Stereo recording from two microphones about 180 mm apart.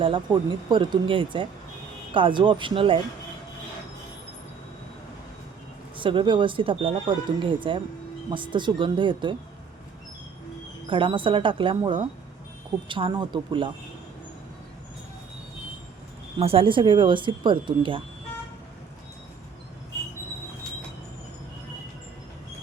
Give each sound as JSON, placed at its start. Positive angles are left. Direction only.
{"t": 0.7, "sound": "speech", "side_deg": -25}
{"t": 6.0, "sound": "speech", "side_deg": -30}
{"t": 10.8, "sound": "speech", "side_deg": -30}
{"t": 16.4, "sound": "speech", "side_deg": -30}